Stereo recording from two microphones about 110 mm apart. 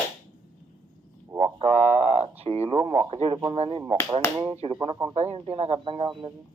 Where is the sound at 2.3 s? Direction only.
65° right (ahead or behind).